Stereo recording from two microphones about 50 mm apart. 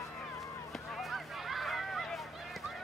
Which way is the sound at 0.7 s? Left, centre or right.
Centre.